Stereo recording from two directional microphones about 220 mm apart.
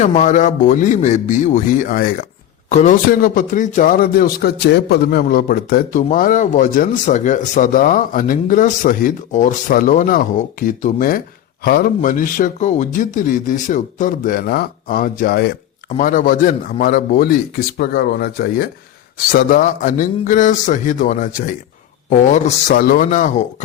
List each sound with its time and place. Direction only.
0.0 s speech: 35° left (ahead or behind)